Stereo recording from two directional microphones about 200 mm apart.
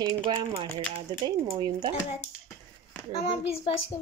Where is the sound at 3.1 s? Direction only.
30° left (ahead or behind).